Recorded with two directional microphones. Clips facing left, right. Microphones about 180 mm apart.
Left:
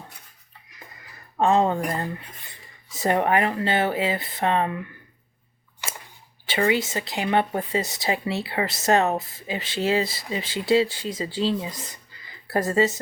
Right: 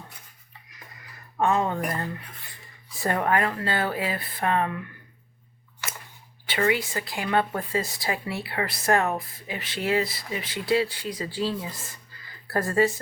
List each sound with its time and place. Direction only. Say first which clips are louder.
1.4 s a woman's voice: left 4 dB; 25° left (ahead or behind)
5.8 s a sound: left 1 dB; 15° left (ahead or behind)
6.4 s a woman's voice: left 2 dB; 25° left (ahead or behind)